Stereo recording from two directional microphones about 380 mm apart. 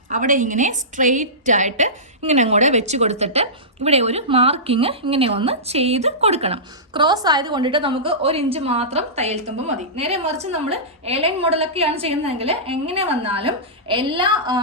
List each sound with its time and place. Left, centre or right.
0.1 s a woman's voice: centre